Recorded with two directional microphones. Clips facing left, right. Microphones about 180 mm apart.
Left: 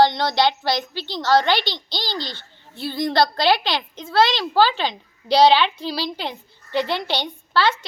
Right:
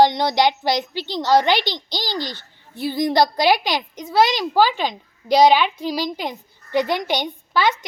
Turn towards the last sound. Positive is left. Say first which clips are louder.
# right 1 dB
turn(degrees=-15)  # may be behind; listen again after turning